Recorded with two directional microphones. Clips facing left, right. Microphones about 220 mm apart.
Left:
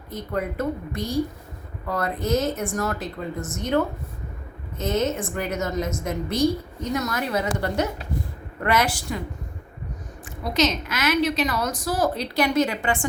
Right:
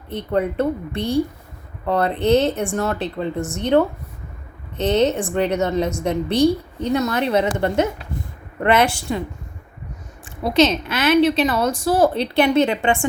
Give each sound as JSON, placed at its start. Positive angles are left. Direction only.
{"t": 0.1, "sound": "a woman's voice", "side_deg": -30}
{"t": 10.5, "sound": "a woman's voice", "side_deg": -30}